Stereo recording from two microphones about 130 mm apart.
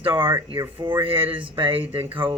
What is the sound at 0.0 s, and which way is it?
Speech, 15° right (ahead or behind).